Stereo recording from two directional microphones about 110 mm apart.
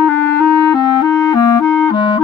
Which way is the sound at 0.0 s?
15° left (ahead or behind).